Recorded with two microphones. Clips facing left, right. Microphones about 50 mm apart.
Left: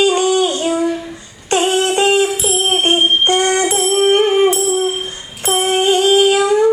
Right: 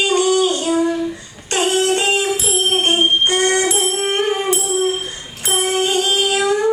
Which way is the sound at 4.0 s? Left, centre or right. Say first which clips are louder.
Left 7 dB; left.